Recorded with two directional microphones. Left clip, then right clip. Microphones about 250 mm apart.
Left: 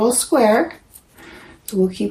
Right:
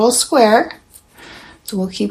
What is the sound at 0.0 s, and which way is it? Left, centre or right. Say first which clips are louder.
Speech: right 3 dB; centre.